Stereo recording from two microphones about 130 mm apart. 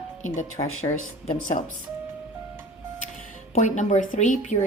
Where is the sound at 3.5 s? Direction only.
70° left (ahead or behind).